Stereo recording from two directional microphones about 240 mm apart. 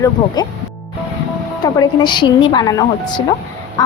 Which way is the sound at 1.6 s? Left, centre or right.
Centre.